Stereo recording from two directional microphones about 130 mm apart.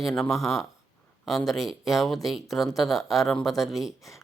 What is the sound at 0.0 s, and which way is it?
Speech, centre (ahead or behind).